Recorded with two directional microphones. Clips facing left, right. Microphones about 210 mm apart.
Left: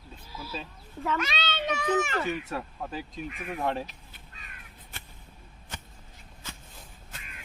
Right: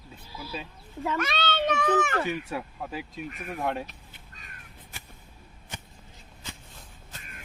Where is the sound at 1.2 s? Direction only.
55° right (ahead or behind).